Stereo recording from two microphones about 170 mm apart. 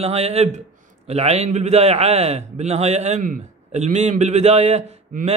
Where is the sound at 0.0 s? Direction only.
40° right (ahead or behind).